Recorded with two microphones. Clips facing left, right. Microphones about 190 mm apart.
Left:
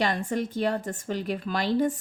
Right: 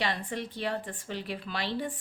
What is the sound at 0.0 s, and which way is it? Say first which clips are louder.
Speech: left 6 dB; 45° left (ahead or behind).